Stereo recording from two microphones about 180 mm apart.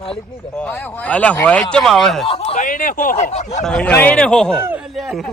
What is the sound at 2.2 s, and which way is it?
Speech, 30° left (ahead or behind).